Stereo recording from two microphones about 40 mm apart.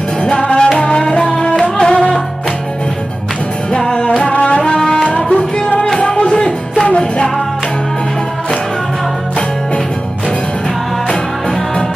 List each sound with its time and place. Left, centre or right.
0.4 s music: left
3.8 s music: centre
4.3 s music: left